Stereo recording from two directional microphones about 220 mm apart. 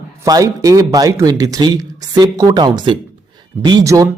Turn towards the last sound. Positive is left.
turn(degrees=-15)  # may be behind; listen again after turning